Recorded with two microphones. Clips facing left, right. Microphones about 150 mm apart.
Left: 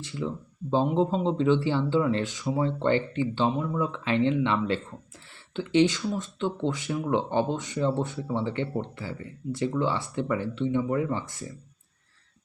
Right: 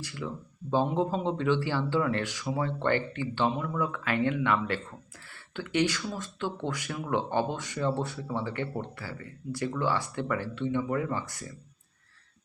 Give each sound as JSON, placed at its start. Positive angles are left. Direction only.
{"t": 0.0, "sound": "speech", "side_deg": 25}